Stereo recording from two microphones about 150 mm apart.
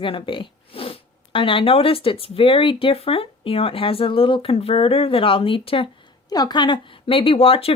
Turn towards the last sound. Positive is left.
turn(degrees=40)  # may be behind; listen again after turning